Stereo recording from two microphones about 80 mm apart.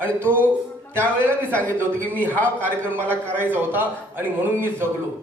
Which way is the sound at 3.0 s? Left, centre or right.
Left.